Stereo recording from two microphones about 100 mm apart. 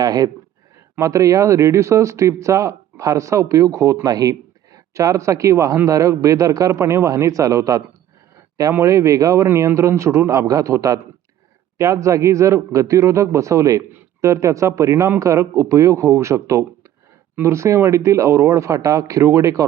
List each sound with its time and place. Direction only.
0.0 s speech: 40° right (ahead or behind)